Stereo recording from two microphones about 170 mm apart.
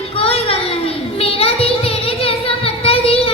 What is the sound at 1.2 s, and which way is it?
Child singing, 35° left (ahead or behind).